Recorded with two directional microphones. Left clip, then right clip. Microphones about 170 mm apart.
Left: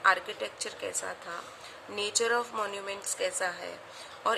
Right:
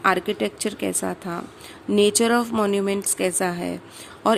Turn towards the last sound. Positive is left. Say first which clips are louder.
# right 9 dB
turn(degrees=-50)  # may be behind; listen again after turning